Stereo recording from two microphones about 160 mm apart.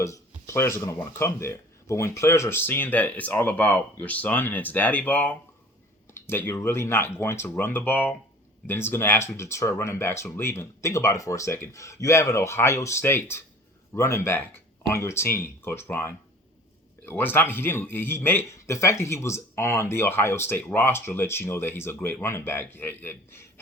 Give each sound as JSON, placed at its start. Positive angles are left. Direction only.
{"t": 0.0, "sound": "speech", "side_deg": 20}